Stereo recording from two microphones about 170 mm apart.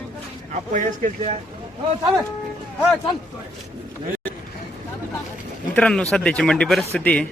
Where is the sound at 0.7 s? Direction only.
50° right (ahead or behind).